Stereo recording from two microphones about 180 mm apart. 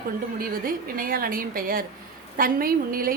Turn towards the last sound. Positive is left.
turn(degrees=-55)  # may be behind; listen again after turning